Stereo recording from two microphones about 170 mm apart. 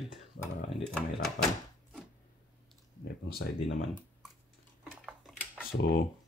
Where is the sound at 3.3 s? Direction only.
65° left (ahead or behind).